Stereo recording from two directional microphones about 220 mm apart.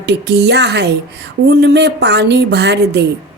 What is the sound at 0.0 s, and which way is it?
Speech, 50° right (ahead or behind).